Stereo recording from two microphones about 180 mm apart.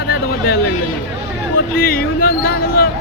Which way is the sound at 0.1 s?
60° left (ahead or behind).